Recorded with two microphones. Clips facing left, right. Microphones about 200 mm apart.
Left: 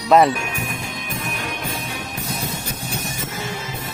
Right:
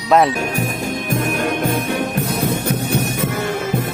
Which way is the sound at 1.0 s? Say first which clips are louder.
Right 11 dB; 50° right (ahead or behind).